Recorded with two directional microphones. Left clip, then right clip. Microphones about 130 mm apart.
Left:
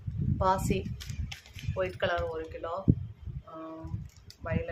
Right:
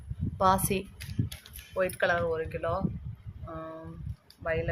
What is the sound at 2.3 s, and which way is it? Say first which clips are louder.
Speech: right 5 dB; 60° right (ahead or behind).